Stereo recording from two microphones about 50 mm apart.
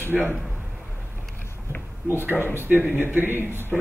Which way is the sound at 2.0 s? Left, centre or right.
Right.